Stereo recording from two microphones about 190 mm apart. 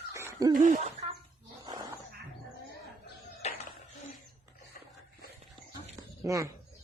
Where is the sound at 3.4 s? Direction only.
35° left (ahead or behind).